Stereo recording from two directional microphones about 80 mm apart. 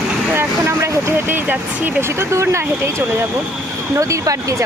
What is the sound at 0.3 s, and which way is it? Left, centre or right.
Speech, right.